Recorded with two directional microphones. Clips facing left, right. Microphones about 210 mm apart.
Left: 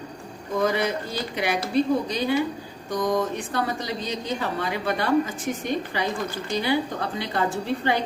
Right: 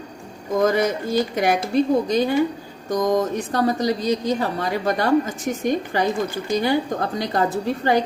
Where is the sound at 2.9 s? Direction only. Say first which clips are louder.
Right 4 dB; 40° right (ahead or behind).